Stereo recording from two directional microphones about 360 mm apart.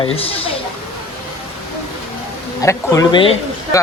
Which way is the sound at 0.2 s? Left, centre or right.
Centre.